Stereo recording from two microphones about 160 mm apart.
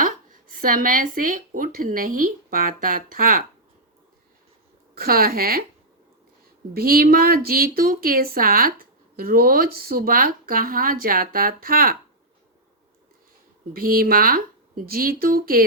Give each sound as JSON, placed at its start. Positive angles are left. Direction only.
{"t": 0.0, "sound": "speech", "side_deg": -60}
{"t": 4.9, "sound": "speech", "side_deg": -70}
{"t": 6.7, "sound": "speech", "side_deg": -70}
{"t": 13.7, "sound": "speech", "side_deg": -65}